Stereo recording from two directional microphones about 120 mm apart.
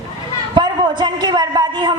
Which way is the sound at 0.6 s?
40° right (ahead or behind).